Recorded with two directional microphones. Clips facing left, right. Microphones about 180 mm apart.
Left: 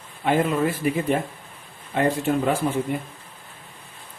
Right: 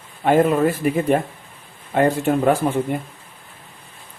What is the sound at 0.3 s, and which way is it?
Speech, 50° right (ahead or behind).